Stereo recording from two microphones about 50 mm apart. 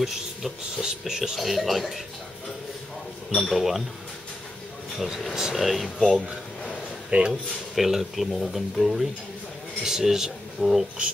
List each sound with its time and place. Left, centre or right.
0.7 s speech: centre
3.3 s speech: centre
4.9 s speech: centre
7.1 s speech: centre
7.7 s speech: centre